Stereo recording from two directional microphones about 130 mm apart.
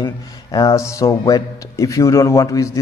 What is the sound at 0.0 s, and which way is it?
Speech, 30° left (ahead or behind).